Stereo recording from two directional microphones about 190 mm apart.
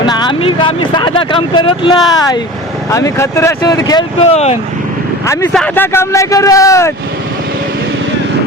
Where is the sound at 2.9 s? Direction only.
15° left (ahead or behind).